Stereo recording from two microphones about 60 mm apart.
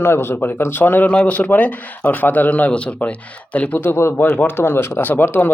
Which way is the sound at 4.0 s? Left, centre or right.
Left.